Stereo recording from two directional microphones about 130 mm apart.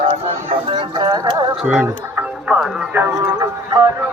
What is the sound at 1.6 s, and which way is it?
Music, 10° right (ahead or behind).